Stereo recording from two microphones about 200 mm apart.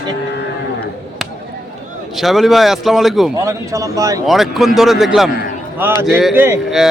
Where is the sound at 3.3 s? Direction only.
15° right (ahead or behind).